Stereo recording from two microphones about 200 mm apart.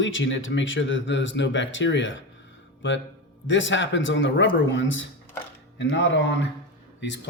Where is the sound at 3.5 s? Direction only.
65° left (ahead or behind).